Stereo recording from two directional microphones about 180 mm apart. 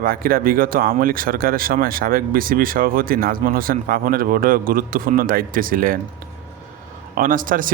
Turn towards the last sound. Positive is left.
turn(degrees=-50)  # may be behind; listen again after turning